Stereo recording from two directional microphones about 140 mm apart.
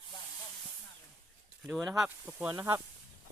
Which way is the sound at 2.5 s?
20° right (ahead or behind).